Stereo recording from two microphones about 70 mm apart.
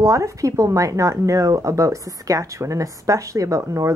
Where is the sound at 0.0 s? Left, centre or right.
Right.